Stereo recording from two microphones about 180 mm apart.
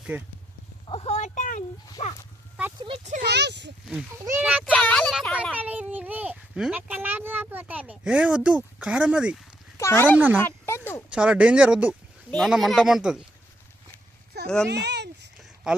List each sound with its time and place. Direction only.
0.1 s a child's voice: 10° right (ahead or behind)
0.9 s speech: 35° left (ahead or behind)
2.8 s speech: 35° right (ahead or behind)
3.2 s speech: 70° right (ahead or behind)
4.3 s a child's voice: 10° right (ahead or behind)
4.7 s speech: 10° left (ahead or behind)
5.5 s a child's voice: 10° right (ahead or behind)
9.7 s speech: 15° left (ahead or behind)
11.1 s speech: 5° right (ahead or behind)
14.4 s speech: 5° left (ahead or behind)
14.7 s a sound: 70° right (ahead or behind)